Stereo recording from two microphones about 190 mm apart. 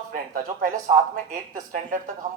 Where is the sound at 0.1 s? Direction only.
45° right (ahead or behind).